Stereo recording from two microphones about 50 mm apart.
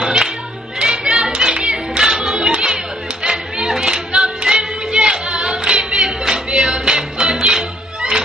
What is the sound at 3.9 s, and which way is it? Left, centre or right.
Singing, centre.